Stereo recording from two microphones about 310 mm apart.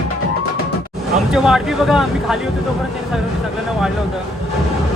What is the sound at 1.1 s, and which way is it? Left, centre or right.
Speech, centre.